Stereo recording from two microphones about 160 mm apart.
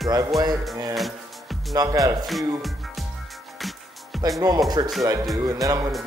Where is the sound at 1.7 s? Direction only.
20° right (ahead or behind).